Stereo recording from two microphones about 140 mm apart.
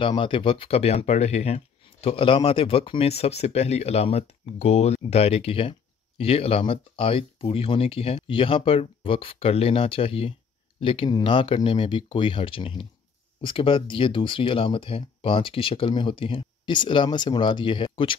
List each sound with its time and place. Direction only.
0.0 s speech: 40° left (ahead or behind)